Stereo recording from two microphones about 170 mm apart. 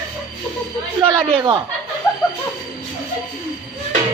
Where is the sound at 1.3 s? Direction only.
25° right (ahead or behind).